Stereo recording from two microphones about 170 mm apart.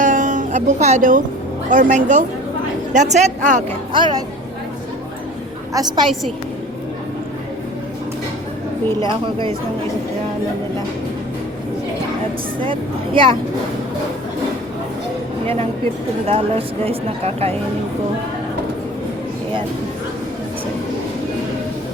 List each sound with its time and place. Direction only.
0.0 s music: 50° right (ahead or behind)
1.7 s speech: 50° right (ahead or behind)
3.9 s speech: 30° right (ahead or behind)
5.7 s speech: 25° right (ahead or behind)
9.0 s speech: 30° right (ahead or behind)
12.5 s speech: 30° right (ahead or behind)
16.2 s speech: 35° right (ahead or behind)